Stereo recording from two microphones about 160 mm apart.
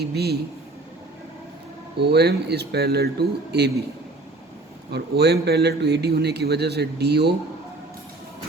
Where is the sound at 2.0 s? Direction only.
90° right.